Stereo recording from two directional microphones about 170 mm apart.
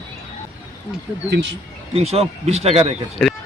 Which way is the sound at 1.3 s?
90° right.